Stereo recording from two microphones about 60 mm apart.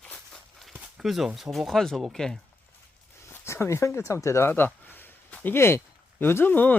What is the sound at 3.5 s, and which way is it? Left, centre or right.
Speech, left.